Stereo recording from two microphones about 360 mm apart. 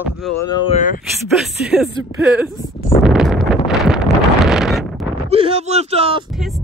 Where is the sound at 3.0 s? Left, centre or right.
Centre.